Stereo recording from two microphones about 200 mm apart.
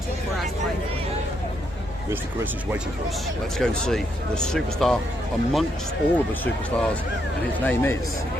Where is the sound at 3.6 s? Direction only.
Centre (ahead or behind).